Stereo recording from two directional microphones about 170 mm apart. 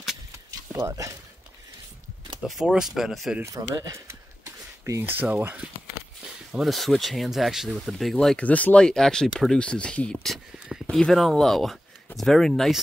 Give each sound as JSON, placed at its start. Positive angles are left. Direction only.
{"t": 0.5, "sound": "a sound", "side_deg": -15}
{"t": 2.4, "sound": "speech", "side_deg": -5}
{"t": 3.4, "sound": "speech", "side_deg": -20}